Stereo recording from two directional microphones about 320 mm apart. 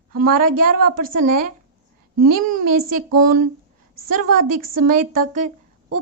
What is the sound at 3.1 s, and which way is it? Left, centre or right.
Speech, right.